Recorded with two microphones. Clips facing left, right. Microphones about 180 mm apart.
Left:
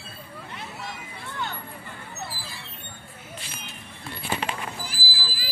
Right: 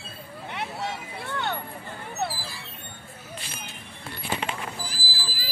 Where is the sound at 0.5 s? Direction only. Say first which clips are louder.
Right 7 dB; 70° right (ahead or behind).